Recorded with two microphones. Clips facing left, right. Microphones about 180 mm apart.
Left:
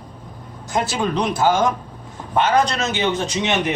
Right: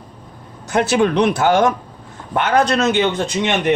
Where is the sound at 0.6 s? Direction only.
65° right (ahead or behind).